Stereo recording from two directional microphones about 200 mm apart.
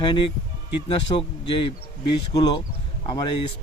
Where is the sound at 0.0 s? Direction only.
25° left (ahead or behind).